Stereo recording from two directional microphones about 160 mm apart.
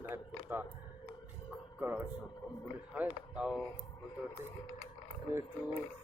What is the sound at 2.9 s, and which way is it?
Speech, 5° right (ahead or behind).